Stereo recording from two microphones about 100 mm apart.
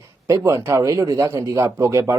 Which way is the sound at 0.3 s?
30° right (ahead or behind).